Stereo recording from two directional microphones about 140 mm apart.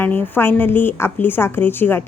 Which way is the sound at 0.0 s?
15° left (ahead or behind).